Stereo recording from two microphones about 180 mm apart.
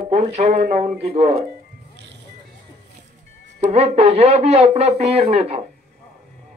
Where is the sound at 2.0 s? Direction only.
70° right (ahead or behind).